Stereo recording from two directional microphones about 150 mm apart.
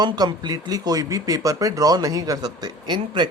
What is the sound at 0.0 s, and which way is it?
A man's voice, 30° right (ahead or behind).